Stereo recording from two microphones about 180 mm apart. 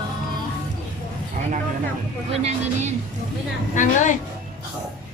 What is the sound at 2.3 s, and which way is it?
Speech, 35° right (ahead or behind).